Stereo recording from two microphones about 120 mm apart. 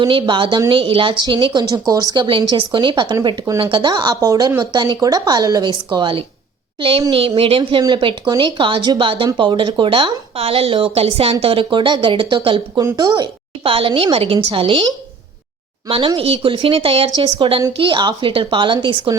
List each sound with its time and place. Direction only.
0.0 s speech: 45° right (ahead or behind)
3.6 s a woman's voice: 45° right (ahead or behind)
12.8 s speech: 35° right (ahead or behind)
15.9 s speech: 45° right (ahead or behind)